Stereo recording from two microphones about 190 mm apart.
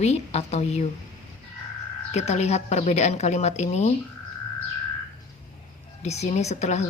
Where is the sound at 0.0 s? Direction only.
35° left (ahead or behind).